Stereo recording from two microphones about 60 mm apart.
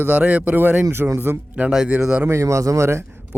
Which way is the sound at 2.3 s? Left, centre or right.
Right.